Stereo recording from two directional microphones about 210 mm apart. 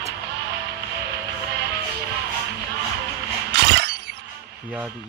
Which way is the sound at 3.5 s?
55° right (ahead or behind).